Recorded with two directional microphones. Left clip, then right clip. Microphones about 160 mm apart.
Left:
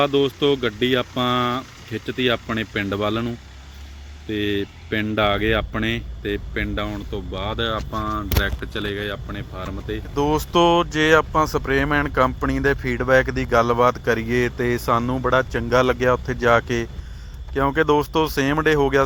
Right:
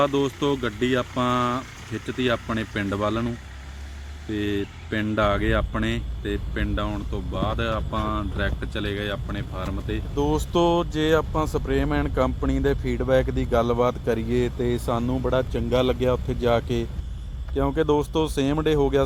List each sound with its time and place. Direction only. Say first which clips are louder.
0.0 s speech: left 4 dB; 10° left (ahead or behind)